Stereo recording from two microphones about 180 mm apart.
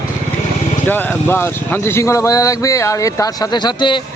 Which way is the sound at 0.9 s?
10° left (ahead or behind).